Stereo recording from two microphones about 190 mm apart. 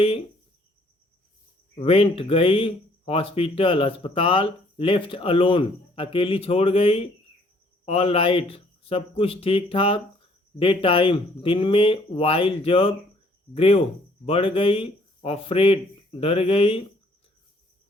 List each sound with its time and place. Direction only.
1.7 s speech: 30° left (ahead or behind)